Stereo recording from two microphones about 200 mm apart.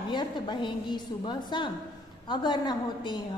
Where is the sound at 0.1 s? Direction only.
20° left (ahead or behind).